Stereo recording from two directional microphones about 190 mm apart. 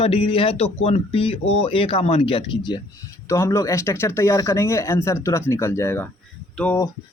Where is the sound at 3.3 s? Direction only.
15° left (ahead or behind).